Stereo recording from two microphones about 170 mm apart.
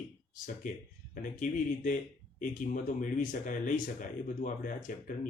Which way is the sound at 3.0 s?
50° left (ahead or behind).